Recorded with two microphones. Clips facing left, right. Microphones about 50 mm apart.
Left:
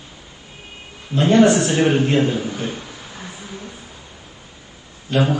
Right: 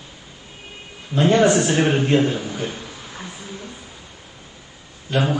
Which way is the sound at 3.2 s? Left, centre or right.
Left.